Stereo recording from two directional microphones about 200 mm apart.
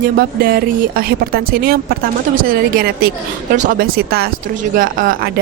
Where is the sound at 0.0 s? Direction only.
50° right (ahead or behind).